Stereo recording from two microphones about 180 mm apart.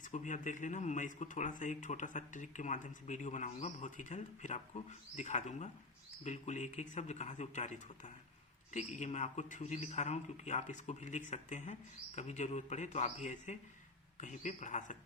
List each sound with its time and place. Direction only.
0.0 s a man's voice: 45° left (ahead or behind)